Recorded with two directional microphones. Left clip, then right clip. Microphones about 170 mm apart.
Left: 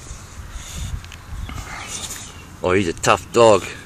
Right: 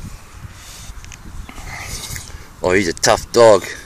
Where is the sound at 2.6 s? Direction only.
35° right (ahead or behind).